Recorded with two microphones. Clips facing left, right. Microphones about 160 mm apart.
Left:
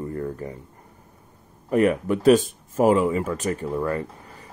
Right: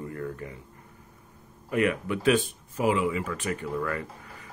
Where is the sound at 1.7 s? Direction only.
40° left (ahead or behind).